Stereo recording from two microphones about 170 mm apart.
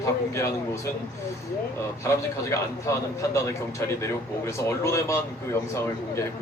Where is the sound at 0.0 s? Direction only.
15° left (ahead or behind).